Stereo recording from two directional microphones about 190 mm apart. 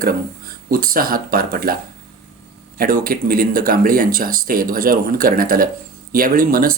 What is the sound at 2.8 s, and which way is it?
Speech, 50° right (ahead or behind).